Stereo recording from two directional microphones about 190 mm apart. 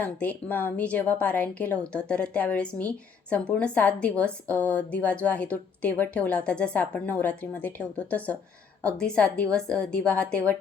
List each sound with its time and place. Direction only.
0.0 s a woman's voice: 10° left (ahead or behind)